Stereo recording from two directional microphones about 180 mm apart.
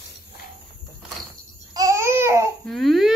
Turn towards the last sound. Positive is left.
turn(degrees=0)  # may be behind; listen again after turning